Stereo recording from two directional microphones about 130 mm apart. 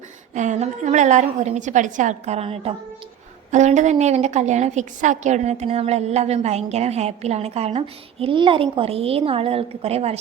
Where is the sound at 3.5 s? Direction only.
65° right (ahead or behind).